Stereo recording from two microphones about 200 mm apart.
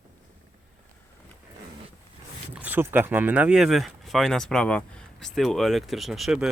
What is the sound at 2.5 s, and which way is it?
Speech, 10° right (ahead or behind).